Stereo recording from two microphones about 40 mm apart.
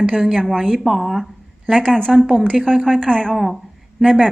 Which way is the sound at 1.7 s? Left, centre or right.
Centre.